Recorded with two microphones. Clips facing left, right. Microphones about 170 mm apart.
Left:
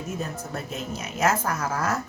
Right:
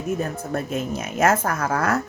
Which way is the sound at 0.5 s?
50° right (ahead or behind).